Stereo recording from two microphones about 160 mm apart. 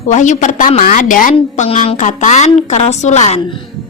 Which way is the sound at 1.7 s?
50° left (ahead or behind).